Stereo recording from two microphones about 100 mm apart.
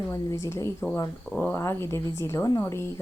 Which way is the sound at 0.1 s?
35° left (ahead or behind).